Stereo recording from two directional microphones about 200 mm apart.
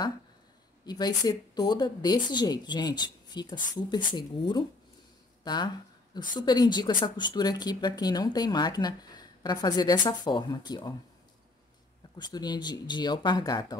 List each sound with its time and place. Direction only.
0.8 s a woman's voice: 20° left (ahead or behind)
12.2 s a woman's voice: 20° left (ahead or behind)